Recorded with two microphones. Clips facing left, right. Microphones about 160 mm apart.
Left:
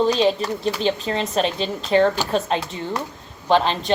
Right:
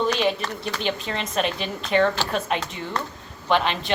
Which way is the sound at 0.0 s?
35° left (ahead or behind).